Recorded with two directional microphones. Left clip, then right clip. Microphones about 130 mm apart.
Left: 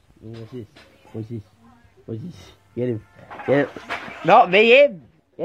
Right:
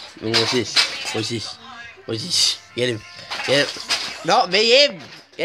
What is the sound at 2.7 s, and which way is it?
Speech, 20° left (ahead or behind).